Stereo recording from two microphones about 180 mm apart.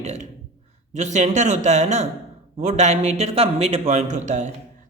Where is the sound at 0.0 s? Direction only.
40° right (ahead or behind).